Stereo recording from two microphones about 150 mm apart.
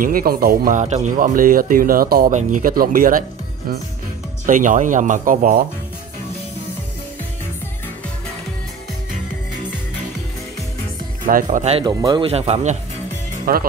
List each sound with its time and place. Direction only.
0.0 s speech: 75° right (ahead or behind); by 1.1 s 50° right (ahead or behind)
1.1 s speech: 65° right (ahead or behind)
2.3 s speech: 65° right (ahead or behind)
4.5 s speech: 60° right (ahead or behind)
11.2 s speech: 60° right (ahead or behind)
11.8 s speech: 30° right (ahead or behind)
12.3 s speech: 45° right (ahead or behind)
13.5 s speech: 80° right